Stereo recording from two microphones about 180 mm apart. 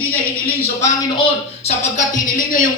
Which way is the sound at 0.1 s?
10° left (ahead or behind).